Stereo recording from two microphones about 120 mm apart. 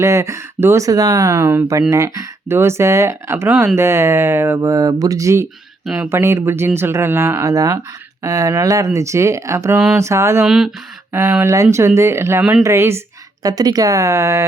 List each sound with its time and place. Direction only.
0.0 s speech: 25° right (ahead or behind)
1.4 s speech: 20° right (ahead or behind)
10.4 s speech: 5° right (ahead or behind)
11.1 s speech: 25° right (ahead or behind)
12.4 s speech: 10° right (ahead or behind)
12.6 s speech: 20° right (ahead or behind)